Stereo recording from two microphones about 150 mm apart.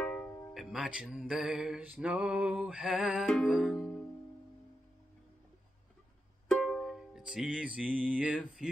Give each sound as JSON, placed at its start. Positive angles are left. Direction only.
{"t": 0.0, "sound": "music", "side_deg": 10}
{"t": 0.6, "sound": "music", "side_deg": 0}
{"t": 6.5, "sound": "music", "side_deg": 5}